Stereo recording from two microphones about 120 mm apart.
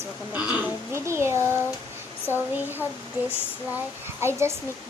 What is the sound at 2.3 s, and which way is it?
A child's voice, 15° right (ahead or behind).